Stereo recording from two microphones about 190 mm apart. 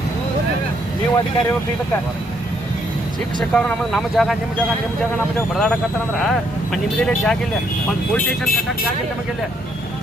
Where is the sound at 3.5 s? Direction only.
5° left (ahead or behind).